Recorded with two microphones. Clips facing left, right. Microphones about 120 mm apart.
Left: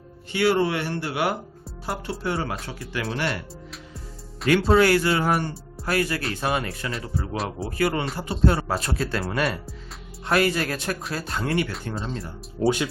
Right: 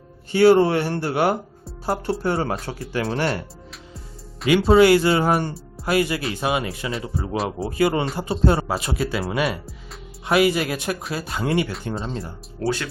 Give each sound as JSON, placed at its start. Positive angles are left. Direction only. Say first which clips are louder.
{"t": 0.3, "sound": "speech", "louder": "right 7 dB", "side_deg": -35}
{"t": 3.7, "sound": "music", "louder": "left 1 dB", "side_deg": 0}
{"t": 5.8, "sound": "speech", "louder": "right 4 dB", "side_deg": -15}
{"t": 7.7, "sound": "speech", "louder": "right 4 dB", "side_deg": -20}
{"t": 8.6, "sound": "speech", "louder": "right 2 dB", "side_deg": -10}
{"t": 11.4, "sound": "speech", "louder": "right 3 dB", "side_deg": -20}
{"t": 12.5, "sound": "speech", "louder": "left 3 dB", "side_deg": 15}